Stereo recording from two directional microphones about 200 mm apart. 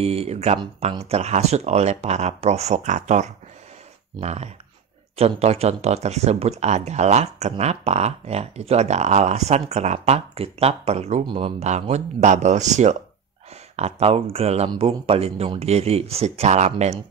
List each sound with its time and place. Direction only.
0.0 s speech: 30° right (ahead or behind)